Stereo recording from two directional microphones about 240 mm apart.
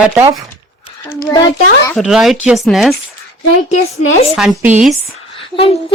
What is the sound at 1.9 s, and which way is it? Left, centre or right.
Speech, centre.